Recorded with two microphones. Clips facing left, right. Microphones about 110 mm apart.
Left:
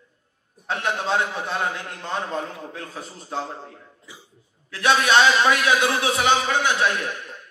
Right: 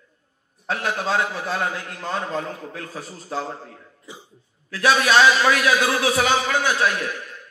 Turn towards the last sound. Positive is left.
turn(degrees=25)  # may be behind; listen again after turning